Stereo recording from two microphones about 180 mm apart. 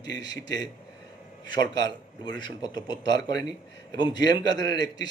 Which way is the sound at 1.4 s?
25° left (ahead or behind).